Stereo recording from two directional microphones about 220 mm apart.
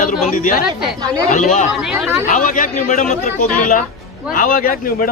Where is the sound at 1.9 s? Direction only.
5° right (ahead or behind).